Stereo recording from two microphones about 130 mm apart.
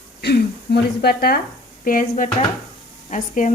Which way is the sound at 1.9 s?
90° left.